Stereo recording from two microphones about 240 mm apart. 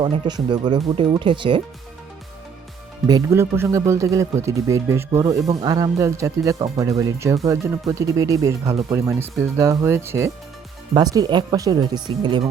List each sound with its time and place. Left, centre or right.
0.0 s speech: centre
3.1 s speech: centre